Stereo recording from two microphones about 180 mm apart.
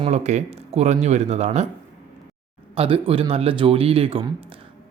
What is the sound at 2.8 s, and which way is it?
Speech, 30° right (ahead or behind).